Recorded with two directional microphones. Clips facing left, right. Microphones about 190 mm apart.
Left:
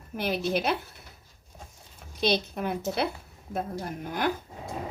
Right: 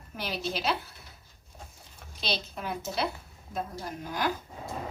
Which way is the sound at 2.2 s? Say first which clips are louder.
Left 7 dB; 55° left (ahead or behind).